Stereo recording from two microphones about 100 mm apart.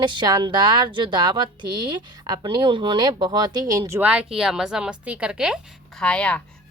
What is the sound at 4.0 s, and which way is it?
A woman's voice, 10° right (ahead or behind).